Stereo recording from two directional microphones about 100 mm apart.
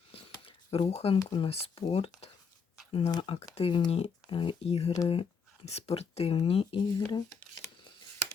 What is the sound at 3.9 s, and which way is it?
Speech, 90° left.